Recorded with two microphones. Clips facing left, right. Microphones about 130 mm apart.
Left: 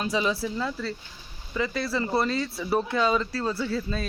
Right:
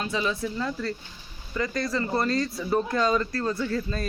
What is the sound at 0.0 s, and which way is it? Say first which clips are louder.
Speech: left 2 dB; 15° left (ahead or behind).